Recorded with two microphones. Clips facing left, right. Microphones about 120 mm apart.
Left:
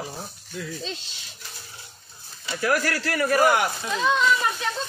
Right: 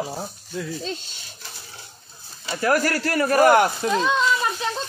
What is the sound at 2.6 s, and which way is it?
Speech, 40° right (ahead or behind).